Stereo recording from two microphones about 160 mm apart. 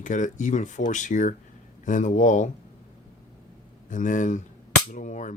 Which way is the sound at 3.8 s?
55° left (ahead or behind).